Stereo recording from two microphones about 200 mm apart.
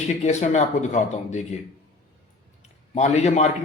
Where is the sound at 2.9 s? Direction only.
35° left (ahead or behind).